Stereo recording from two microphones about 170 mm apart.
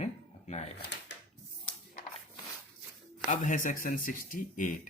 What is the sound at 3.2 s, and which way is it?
Speech, 45° left (ahead or behind).